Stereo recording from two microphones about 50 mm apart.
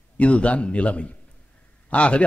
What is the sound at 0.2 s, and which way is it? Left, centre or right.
A man's voice, left.